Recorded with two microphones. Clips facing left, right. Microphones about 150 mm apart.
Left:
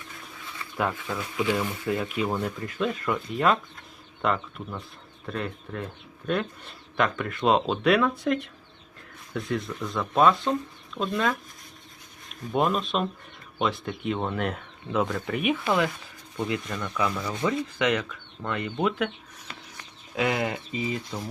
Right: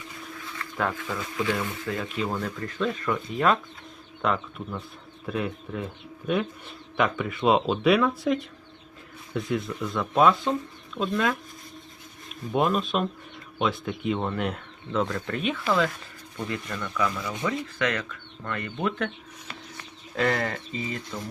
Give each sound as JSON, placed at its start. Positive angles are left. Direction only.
{"t": 0.6, "sound": "a man's voice", "side_deg": 5}
{"t": 12.5, "sound": "a man's voice", "side_deg": 0}
{"t": 16.6, "sound": "a man's voice", "side_deg": 0}
{"t": 17.2, "sound": "speech", "side_deg": 20}
{"t": 20.1, "sound": "a man's voice", "side_deg": 5}
{"t": 20.7, "sound": "speech", "side_deg": 15}